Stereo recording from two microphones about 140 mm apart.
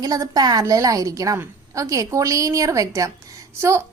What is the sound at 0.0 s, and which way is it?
A woman's voice, 25° right (ahead or behind).